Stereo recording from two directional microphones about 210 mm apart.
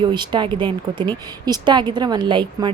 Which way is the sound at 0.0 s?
20° right (ahead or behind).